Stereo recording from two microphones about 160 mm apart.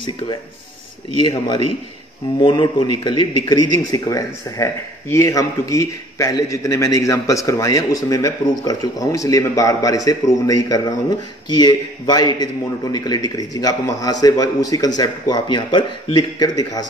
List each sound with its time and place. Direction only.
2.3 s a man's voice: 30° left (ahead or behind)